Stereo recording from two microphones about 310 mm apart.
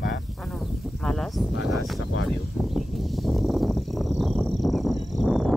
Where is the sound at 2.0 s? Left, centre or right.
Left.